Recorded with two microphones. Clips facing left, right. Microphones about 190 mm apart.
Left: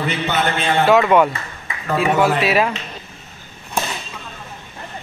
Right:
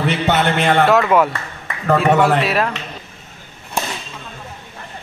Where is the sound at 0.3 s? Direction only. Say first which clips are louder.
Right 4 dB; 65° right (ahead or behind).